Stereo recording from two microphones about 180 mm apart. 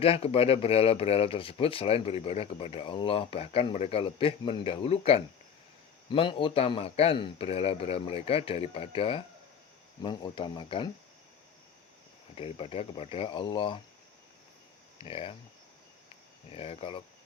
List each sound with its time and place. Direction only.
0.0 s speech: 30° left (ahead or behind)
12.4 s speech: 35° left (ahead or behind)
15.0 s speech: 30° left (ahead or behind)
16.5 s speech: 35° left (ahead or behind)